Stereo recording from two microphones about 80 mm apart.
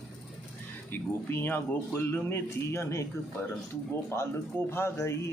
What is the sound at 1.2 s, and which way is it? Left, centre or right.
A man's voice, left.